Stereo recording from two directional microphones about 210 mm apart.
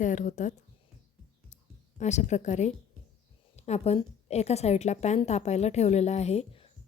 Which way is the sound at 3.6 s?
30° left (ahead or behind).